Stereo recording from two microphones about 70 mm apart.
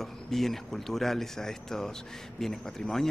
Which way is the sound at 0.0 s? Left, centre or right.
Centre.